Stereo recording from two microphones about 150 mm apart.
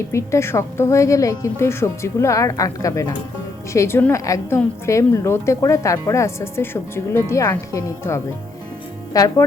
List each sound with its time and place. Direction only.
0.1 s a woman's voice: 20° left (ahead or behind)